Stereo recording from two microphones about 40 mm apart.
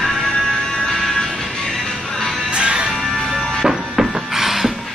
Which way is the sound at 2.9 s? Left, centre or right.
Centre.